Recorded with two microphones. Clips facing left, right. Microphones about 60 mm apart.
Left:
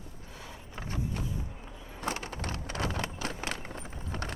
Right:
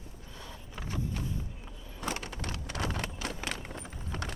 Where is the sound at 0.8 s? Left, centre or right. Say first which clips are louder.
Left 1 dB; left.